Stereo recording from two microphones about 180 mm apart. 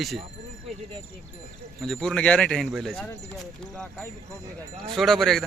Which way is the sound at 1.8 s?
Centre (ahead or behind).